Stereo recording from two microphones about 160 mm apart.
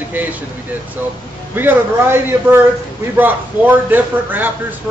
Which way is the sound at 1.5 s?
15° right (ahead or behind).